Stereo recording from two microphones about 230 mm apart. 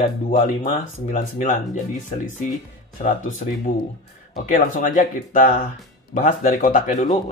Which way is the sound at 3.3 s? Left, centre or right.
Left.